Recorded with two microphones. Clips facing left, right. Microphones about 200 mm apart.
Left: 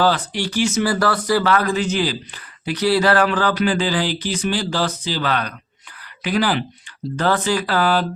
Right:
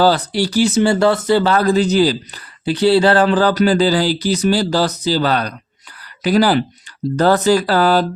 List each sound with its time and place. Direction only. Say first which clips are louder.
0.0 s speech: right 5 dB; 35° right (ahead or behind)